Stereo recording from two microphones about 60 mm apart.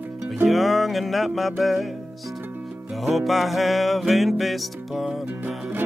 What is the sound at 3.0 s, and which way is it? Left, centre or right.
Music, centre.